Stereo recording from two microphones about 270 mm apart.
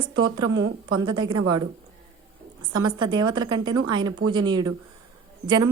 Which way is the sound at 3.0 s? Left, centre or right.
Centre.